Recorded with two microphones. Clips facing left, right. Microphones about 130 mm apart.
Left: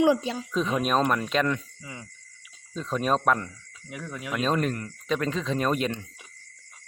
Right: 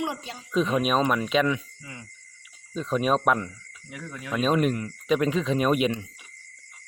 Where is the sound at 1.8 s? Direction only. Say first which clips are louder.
Left 1 dB; 20° left (ahead or behind).